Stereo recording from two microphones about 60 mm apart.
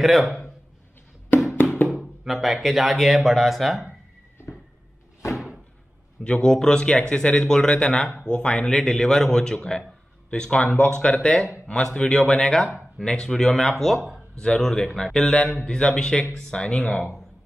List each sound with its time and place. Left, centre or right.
0.0 s a man's voice: centre
2.2 s speech: centre
6.2 s a man's voice: left